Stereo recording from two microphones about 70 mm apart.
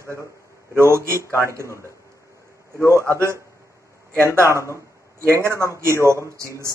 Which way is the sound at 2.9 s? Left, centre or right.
Right.